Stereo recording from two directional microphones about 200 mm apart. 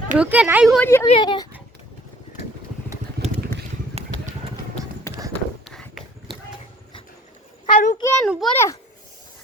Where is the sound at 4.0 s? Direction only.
30° right (ahead or behind).